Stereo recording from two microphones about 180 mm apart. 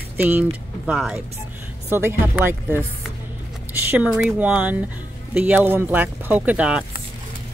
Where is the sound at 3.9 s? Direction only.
5° right (ahead or behind).